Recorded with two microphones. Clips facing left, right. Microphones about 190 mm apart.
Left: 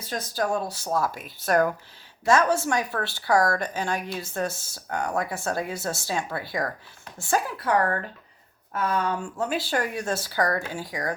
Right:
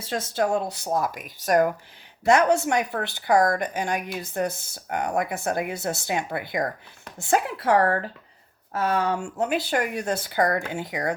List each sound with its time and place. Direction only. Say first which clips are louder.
0.0 s a woman's voice: right 3 dB; 25° right (ahead or behind)